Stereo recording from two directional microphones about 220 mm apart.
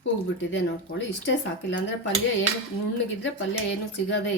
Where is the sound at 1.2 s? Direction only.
55° left (ahead or behind).